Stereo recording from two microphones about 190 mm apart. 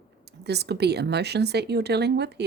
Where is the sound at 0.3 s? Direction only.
60° right (ahead or behind).